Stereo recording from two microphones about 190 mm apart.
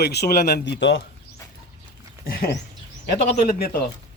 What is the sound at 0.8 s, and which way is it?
Speech, 70° left (ahead or behind).